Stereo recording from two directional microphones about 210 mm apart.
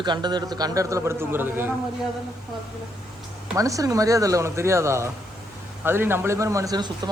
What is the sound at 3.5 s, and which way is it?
Speech, 15° right (ahead or behind).